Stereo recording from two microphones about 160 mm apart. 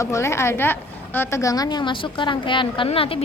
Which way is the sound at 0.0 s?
20° left (ahead or behind).